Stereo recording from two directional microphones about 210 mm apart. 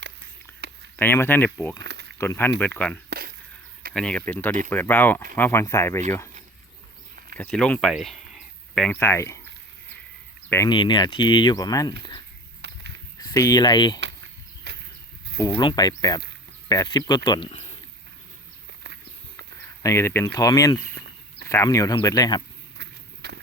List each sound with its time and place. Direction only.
0.9 s speech: 10° left (ahead or behind)
1.8 s a sound: 55° right (ahead or behind)
2.1 s speech: 10° left (ahead or behind)
3.1 s a sound: 45° right (ahead or behind)
3.9 s speech: 5° left (ahead or behind)
7.3 s speech: 5° left (ahead or behind)
10.5 s speech: 15° left (ahead or behind)
12.6 s a sound: 55° right (ahead or behind)
13.1 s speech: 15° left (ahead or behind)
14.7 s a sound: 55° right (ahead or behind)
15.4 s speech: 15° left (ahead or behind)
19.8 s speech: 15° left (ahead or behind)
22.8 s walk: 55° right (ahead or behind)